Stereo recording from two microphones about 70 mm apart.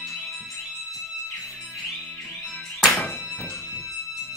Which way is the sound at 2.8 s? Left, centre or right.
Centre.